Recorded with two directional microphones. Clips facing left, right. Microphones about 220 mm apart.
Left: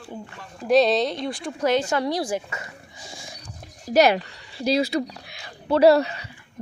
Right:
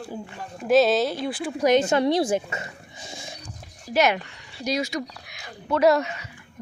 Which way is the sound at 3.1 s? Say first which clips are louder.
Right 3 dB; 25° right (ahead or behind).